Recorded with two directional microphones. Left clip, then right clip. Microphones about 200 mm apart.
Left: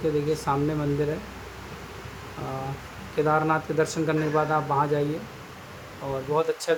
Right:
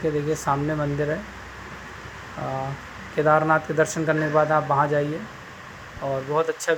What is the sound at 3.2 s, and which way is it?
Speech, 10° right (ahead or behind).